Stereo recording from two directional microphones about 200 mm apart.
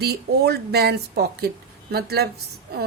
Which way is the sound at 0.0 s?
55° right (ahead or behind).